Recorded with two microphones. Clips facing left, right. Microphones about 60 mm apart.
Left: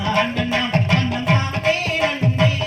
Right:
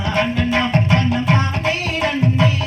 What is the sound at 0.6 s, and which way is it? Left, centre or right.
Music, right.